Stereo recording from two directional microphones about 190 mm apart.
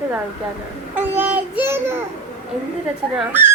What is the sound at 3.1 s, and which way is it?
Speech, 5° right (ahead or behind).